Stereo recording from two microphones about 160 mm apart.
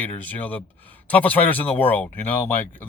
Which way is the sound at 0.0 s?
10° left (ahead or behind).